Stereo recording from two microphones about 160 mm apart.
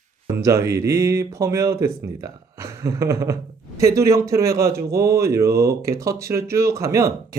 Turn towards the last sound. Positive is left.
turn(degrees=-20)  # may be behind; listen again after turning